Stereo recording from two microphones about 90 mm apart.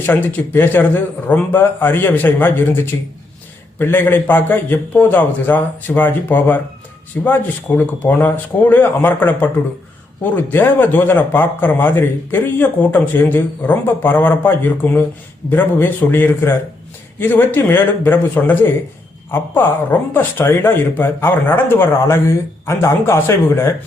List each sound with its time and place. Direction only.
0.0 s speech: 25° left (ahead or behind)